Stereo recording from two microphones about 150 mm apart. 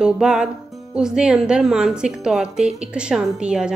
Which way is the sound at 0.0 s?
5° right (ahead or behind).